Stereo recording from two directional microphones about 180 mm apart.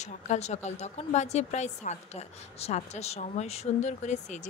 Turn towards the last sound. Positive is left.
turn(degrees=40)  # may be behind; listen again after turning